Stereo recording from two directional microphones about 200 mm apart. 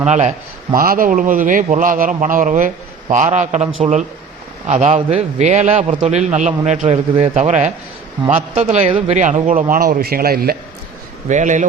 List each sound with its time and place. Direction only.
0.1 s a man's voice: 35° right (ahead or behind)
11.3 s a man's voice: 40° right (ahead or behind)